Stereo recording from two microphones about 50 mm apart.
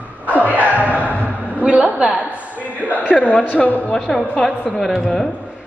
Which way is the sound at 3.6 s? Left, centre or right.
Left.